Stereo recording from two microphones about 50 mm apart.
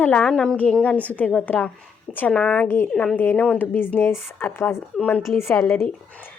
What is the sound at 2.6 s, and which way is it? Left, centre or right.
Speech, left.